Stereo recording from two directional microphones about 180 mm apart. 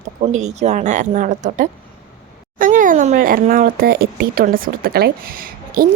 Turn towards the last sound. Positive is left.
turn(degrees=-55)  # may be behind; listen again after turning